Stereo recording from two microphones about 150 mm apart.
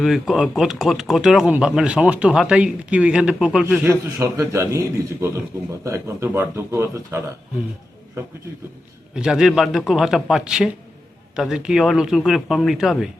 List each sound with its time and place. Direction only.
0.0 s speech: centre (ahead or behind)
3.8 s a man's voice: 20° right (ahead or behind)
9.1 s speech: 5° right (ahead or behind)